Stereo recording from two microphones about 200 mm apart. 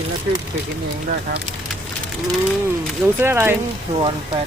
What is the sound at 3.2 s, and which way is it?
Speech, 10° right (ahead or behind).